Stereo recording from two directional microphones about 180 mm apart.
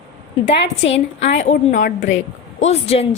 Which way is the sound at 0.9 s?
35° left (ahead or behind).